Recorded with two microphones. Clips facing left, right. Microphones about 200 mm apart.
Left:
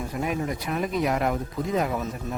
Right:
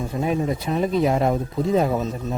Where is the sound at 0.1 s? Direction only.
25° right (ahead or behind).